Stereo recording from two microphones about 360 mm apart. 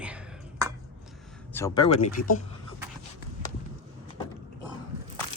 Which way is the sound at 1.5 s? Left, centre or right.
Centre.